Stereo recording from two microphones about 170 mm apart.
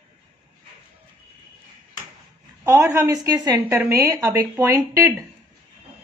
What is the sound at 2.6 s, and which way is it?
A woman's voice, 15° right (ahead or behind).